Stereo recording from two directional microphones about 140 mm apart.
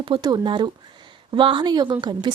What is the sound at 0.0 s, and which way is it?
A woman's voice, 35° right (ahead or behind).